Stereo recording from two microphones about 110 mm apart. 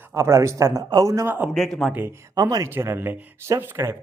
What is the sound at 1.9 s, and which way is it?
Speech, 25° right (ahead or behind).